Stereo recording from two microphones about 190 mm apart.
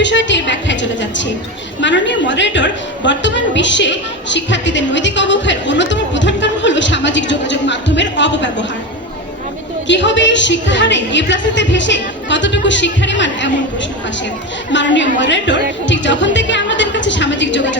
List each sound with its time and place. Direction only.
0.0 s a woman's voice: 70° left (ahead or behind)
9.8 s a woman's voice: 70° left (ahead or behind)
14.7 s a woman's voice: 70° left (ahead or behind)